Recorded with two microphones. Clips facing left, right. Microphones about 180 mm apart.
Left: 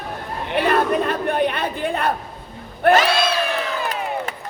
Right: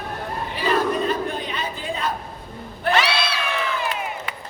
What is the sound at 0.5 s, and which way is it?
Chatter, 60° left (ahead or behind).